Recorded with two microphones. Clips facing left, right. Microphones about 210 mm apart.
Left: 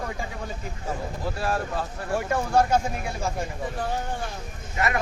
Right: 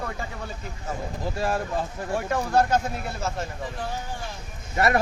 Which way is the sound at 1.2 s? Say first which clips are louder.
Right 1 dB; 15° right (ahead or behind).